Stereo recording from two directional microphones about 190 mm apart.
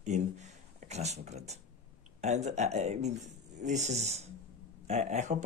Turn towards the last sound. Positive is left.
turn(degrees=-40)  # may be behind; listen again after turning